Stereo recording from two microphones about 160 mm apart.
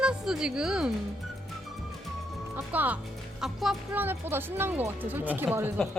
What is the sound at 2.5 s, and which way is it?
Speech, 10° right (ahead or behind).